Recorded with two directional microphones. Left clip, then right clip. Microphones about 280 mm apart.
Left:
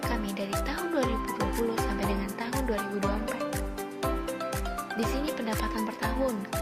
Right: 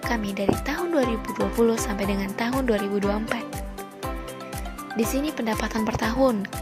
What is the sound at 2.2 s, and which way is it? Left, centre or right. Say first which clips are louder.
Speech: right 6 dB; right.